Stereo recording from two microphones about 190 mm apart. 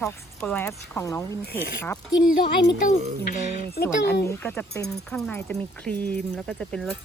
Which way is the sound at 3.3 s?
55° left (ahead or behind).